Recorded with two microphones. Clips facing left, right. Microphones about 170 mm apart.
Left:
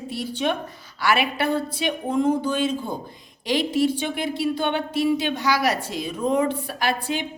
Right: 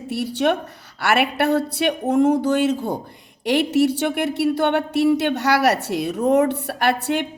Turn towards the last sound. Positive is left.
turn(degrees=-65)  # may be behind; listen again after turning